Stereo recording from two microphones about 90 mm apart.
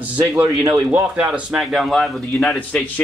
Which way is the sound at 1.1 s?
15° right (ahead or behind).